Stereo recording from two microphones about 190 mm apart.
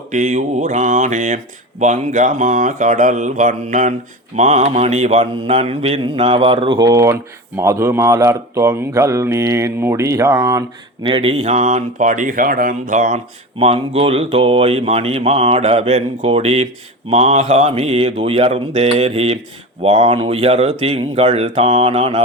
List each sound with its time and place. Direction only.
0.1 s speech: 40° right (ahead or behind)
4.4 s mantra: 35° right (ahead or behind); by 7.2 s 15° right (ahead or behind)
7.6 s speech: 15° right (ahead or behind); by 13.1 s 40° right (ahead or behind)
13.6 s speech: 30° right (ahead or behind)